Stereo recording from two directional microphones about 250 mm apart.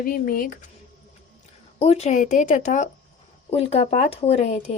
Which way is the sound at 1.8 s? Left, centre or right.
Left.